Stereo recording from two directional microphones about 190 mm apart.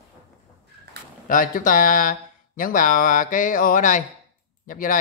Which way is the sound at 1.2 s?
45° left (ahead or behind).